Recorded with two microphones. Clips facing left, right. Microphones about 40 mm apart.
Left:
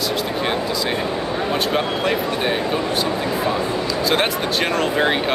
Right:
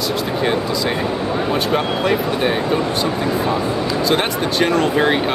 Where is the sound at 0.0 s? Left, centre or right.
Centre.